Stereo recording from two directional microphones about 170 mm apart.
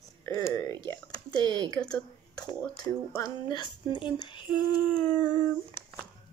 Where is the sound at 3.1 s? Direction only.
25° left (ahead or behind).